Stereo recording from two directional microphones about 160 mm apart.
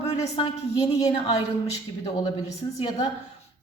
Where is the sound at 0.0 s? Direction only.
35° left (ahead or behind).